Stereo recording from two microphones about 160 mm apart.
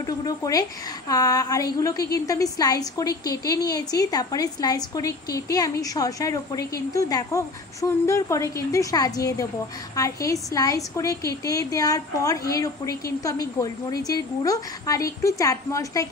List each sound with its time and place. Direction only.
0.0 s a woman's voice: 20° left (ahead or behind)